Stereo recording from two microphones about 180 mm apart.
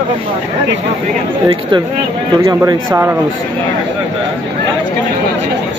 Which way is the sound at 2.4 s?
15° right (ahead or behind).